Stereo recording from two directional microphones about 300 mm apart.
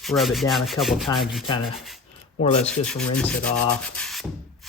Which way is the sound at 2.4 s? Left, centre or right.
Left.